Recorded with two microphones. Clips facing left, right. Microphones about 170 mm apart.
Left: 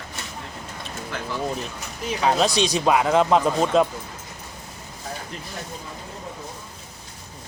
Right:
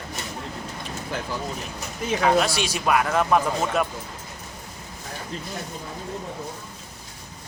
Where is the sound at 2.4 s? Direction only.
20° left (ahead or behind).